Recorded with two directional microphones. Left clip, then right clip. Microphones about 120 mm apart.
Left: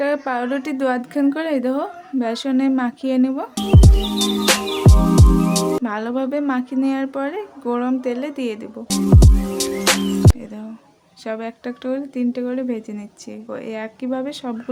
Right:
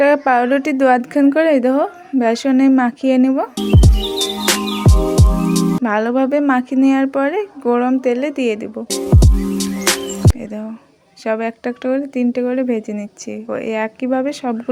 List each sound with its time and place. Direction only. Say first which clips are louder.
0.0 s a woman's voice: right 8 dB; 40° right (ahead or behind)
3.8 s music: right 1 dB; centre (ahead or behind)
5.8 s a woman's voice: right 7 dB; 35° right (ahead or behind)
8.9 s music: left 1 dB; centre (ahead or behind)
11.3 s a woman's voice: right 8 dB; 35° right (ahead or behind)